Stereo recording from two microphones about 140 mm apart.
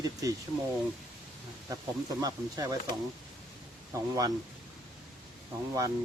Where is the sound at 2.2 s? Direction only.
25° right (ahead or behind).